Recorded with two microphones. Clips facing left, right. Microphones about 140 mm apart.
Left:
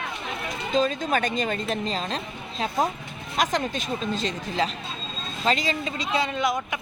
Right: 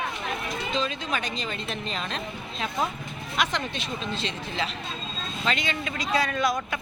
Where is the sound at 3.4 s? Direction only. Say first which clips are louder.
Left 4 dB; 45° left (ahead or behind); by 6.8 s 20° left (ahead or behind).